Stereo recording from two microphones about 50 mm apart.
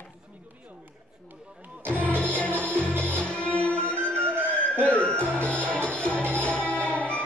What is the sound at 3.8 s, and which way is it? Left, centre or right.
Music, right.